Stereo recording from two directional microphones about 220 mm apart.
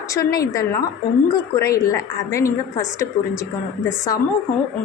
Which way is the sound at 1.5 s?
15° left (ahead or behind).